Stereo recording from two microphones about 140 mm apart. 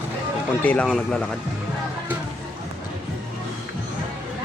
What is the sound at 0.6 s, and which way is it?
Speech, 10° left (ahead or behind).